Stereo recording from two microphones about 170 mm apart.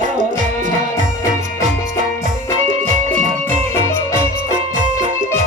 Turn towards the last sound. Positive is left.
turn(degrees=15)  # may be behind; listen again after turning